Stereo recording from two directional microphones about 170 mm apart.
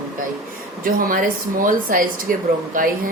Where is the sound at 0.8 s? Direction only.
55° right (ahead or behind).